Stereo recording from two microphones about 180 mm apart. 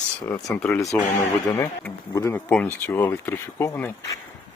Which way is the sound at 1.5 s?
15° left (ahead or behind).